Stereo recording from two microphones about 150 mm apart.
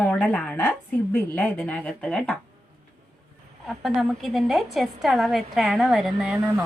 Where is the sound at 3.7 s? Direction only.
Centre (ahead or behind).